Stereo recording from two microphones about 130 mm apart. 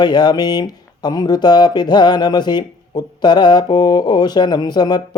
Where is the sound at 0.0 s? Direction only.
30° left (ahead or behind).